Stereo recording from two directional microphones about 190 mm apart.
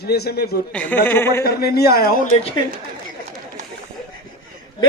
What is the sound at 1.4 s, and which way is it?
Speech, 55° left (ahead or behind).